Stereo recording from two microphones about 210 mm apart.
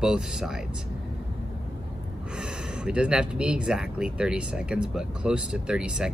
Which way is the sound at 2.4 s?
5° right (ahead or behind).